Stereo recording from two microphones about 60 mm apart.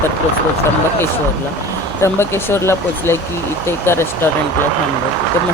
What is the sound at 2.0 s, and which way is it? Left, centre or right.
Speech, left.